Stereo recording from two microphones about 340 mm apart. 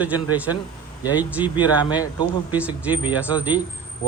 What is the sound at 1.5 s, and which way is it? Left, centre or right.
Speech, centre.